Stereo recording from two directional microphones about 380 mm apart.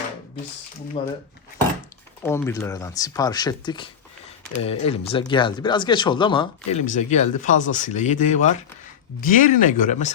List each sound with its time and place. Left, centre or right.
1.0 s speech: centre
2.2 s speech: centre